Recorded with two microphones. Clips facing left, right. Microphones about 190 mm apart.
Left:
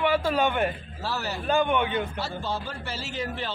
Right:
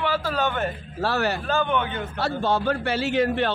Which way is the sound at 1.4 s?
15° left (ahead or behind).